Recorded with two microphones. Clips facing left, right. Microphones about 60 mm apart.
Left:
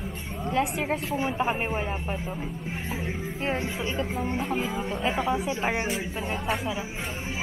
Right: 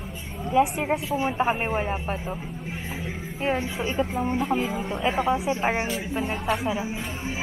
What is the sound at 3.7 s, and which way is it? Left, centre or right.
Speech, centre.